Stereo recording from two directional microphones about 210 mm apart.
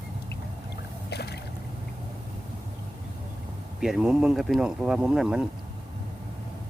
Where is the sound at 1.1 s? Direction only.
50° left (ahead or behind).